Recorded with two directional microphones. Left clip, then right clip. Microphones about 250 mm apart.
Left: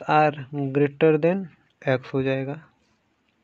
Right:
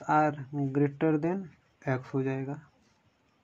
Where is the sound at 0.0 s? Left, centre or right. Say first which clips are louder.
Left 7 dB; left.